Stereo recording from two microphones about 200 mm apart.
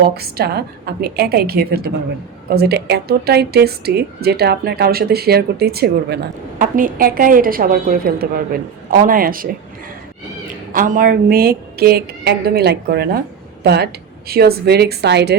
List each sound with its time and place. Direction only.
0.0 s speech: 50° right (ahead or behind)
6.6 s speech: 40° right (ahead or behind)
10.7 s speech: 45° right (ahead or behind)